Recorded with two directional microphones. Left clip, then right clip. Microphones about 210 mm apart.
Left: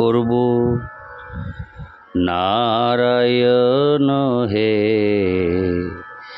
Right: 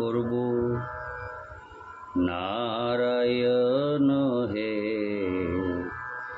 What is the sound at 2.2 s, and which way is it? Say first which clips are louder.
Speech: left 14 dB; 55° left (ahead or behind).